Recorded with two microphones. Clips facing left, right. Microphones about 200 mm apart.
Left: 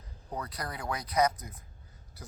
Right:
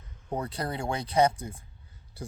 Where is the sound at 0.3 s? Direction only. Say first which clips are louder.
Right 6 dB; 30° right (ahead or behind).